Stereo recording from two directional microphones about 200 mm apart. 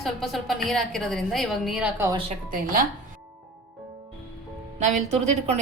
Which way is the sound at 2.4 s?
45° right (ahead or behind).